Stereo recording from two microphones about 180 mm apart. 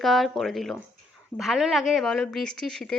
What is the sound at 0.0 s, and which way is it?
A woman's voice, centre (ahead or behind).